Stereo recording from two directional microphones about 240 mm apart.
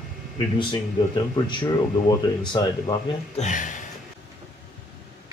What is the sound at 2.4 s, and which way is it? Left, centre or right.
Speech, centre.